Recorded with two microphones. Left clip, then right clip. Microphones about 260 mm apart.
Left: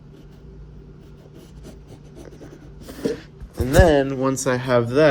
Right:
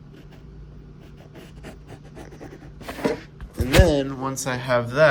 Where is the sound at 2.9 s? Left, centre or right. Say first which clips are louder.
Right 1 dB; right.